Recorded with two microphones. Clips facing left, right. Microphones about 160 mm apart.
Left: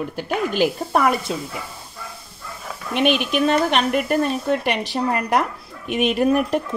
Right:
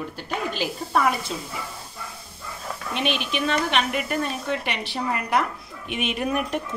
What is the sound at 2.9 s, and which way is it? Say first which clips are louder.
A woman's voice: left 7 dB; 55° left (ahead or behind).